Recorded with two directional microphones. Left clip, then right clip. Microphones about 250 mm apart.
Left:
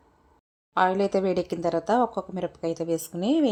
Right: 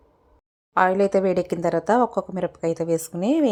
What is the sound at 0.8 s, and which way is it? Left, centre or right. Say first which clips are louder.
A woman's voice: right 4 dB; centre.